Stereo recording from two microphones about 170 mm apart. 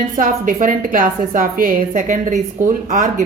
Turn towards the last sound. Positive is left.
turn(degrees=-50)  # may be behind; listen again after turning